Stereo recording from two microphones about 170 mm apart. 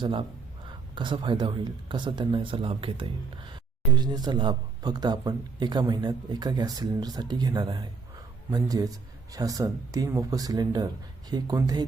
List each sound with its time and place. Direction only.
0.0 s speech: 30° right (ahead or behind)